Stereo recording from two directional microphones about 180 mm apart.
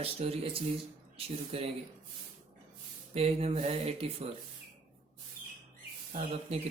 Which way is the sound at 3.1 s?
35° right (ahead or behind).